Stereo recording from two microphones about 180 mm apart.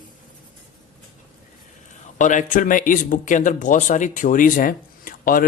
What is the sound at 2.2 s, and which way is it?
Speech, 45° left (ahead or behind).